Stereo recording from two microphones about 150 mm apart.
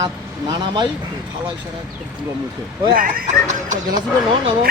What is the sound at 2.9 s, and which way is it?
Speech, 70° right (ahead or behind).